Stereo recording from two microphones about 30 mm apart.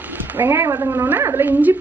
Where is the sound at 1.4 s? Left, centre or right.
Right.